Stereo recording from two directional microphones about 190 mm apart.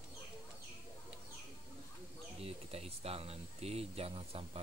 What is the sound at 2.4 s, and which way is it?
Speech, 30° right (ahead or behind).